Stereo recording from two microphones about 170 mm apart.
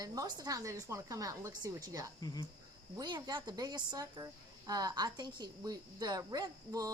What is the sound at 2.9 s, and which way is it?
A woman's voice, 25° right (ahead or behind).